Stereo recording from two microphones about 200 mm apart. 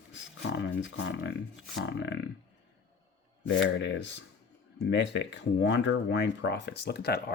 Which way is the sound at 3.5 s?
65° left (ahead or behind).